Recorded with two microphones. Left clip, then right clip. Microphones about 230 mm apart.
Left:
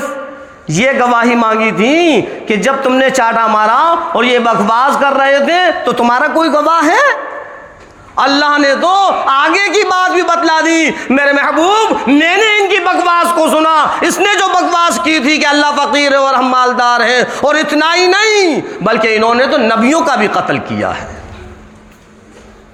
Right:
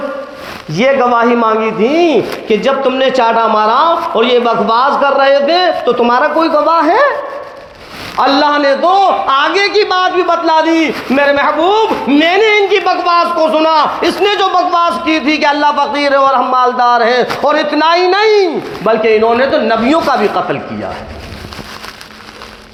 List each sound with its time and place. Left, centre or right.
0.7 s a man's voice: left
8.2 s a man's voice: left